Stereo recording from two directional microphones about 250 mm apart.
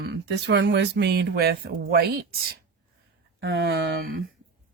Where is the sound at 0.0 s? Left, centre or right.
Right.